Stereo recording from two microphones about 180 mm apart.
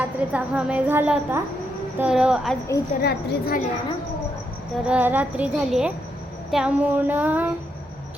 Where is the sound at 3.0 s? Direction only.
60° left (ahead or behind).